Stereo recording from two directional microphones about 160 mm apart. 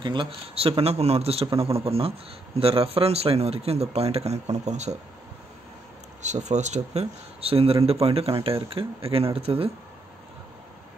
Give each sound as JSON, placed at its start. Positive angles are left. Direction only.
{"t": 0.0, "sound": "a man's voice", "side_deg": -30}
{"t": 6.2, "sound": "a man's voice", "side_deg": -45}